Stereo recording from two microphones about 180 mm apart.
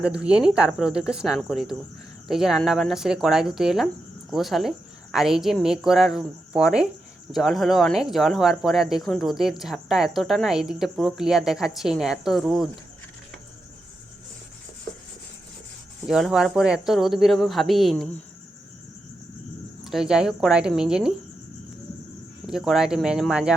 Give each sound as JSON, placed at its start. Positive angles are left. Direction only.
{"t": 0.0, "sound": "speech", "side_deg": -5}
{"t": 16.0, "sound": "speech", "side_deg": 0}
{"t": 19.8, "sound": "speech", "side_deg": 0}
{"t": 22.4, "sound": "speech", "side_deg": 0}